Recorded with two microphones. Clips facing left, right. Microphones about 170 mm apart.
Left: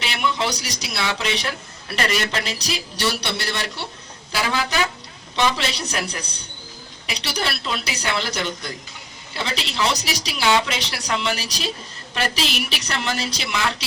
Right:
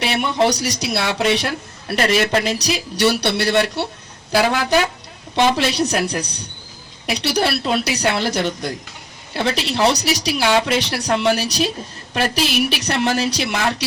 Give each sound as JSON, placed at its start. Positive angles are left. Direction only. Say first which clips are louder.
{"t": 0.0, "sound": "speech", "louder": "right 6 dB", "side_deg": -55}
{"t": 7.1, "sound": "speech", "louder": "right 8 dB", "side_deg": -50}